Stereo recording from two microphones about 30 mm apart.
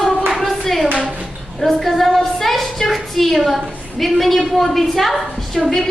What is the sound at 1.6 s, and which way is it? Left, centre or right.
A woman's voice, centre.